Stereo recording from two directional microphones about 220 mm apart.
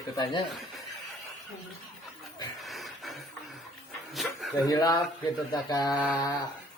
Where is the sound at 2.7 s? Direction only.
Centre (ahead or behind).